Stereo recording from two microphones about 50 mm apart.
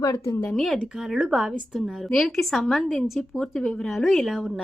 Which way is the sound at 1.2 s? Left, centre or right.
Centre.